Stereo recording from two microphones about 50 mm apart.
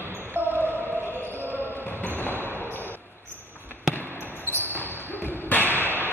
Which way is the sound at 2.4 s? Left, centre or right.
Left.